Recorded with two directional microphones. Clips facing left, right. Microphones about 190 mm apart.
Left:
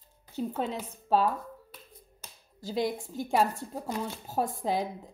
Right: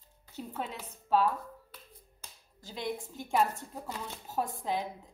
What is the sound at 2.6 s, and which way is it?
A woman's voice, 35° left (ahead or behind).